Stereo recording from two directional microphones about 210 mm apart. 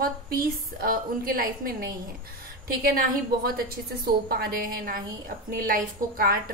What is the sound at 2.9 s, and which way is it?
A woman's voice, 45° right (ahead or behind).